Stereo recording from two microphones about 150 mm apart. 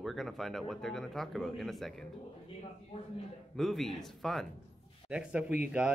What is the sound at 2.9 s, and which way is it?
Speech, 45° left (ahead or behind).